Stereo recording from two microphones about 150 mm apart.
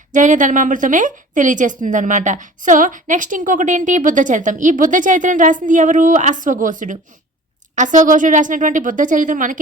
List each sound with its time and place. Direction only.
0.1 s a woman's voice: 55° right (ahead or behind)